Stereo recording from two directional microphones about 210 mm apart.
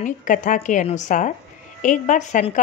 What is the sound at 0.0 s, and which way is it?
Speech, 35° left (ahead or behind).